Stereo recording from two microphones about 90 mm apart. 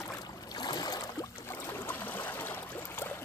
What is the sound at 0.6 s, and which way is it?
Boat, 50° left (ahead or behind).